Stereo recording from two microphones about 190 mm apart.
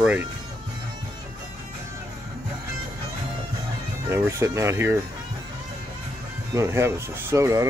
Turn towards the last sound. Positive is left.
turn(degrees=-15)  # may be behind; listen again after turning